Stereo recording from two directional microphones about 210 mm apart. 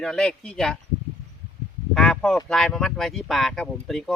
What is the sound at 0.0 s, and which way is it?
Speech, 5° left (ahead or behind).